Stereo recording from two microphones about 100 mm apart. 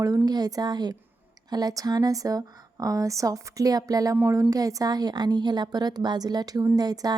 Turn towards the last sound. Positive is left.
turn(degrees=-40)  # may be behind; listen again after turning